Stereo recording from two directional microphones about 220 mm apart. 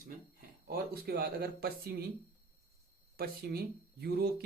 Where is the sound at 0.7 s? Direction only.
45° right (ahead or behind).